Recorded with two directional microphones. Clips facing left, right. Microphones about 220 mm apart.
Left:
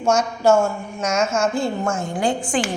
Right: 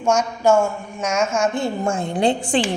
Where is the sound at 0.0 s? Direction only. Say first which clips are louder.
Even; 10° right (ahead or behind).